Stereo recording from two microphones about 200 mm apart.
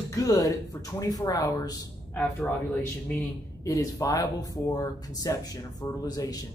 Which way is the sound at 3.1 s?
10° left (ahead or behind).